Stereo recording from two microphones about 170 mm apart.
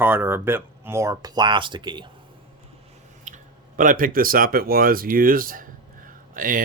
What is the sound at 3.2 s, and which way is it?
Speech, 50° right (ahead or behind).